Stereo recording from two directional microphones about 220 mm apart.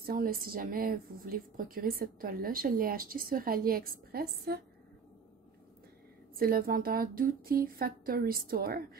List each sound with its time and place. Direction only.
0.0 s a woman's voice: 40° right (ahead or behind)
6.3 s a woman's voice: 40° right (ahead or behind)